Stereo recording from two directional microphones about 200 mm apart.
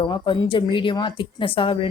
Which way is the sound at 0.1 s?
25° left (ahead or behind).